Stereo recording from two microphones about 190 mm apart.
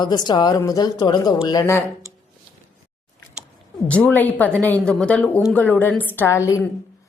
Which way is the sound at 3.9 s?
5° left (ahead or behind).